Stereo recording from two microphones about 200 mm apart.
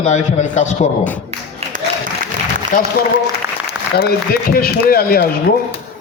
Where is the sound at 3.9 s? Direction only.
50° left (ahead or behind).